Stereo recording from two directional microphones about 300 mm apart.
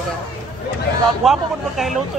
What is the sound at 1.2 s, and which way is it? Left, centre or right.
Speech, centre.